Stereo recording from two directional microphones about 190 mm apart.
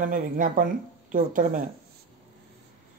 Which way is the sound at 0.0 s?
45° right (ahead or behind).